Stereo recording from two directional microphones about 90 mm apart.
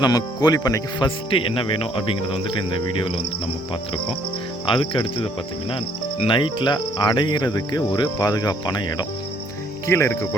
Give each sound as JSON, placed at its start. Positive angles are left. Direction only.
{"t": 0.0, "sound": "speech", "side_deg": 45}
{"t": 4.6, "sound": "cricket", "side_deg": 65}
{"t": 6.2, "sound": "speech", "side_deg": 65}
{"t": 9.8, "sound": "cricket", "side_deg": 30}